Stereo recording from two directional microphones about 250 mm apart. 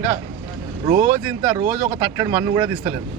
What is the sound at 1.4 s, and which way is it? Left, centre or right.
Speech, centre.